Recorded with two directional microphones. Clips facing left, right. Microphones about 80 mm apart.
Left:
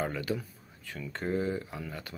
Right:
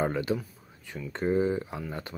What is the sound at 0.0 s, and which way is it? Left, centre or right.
Speech, right.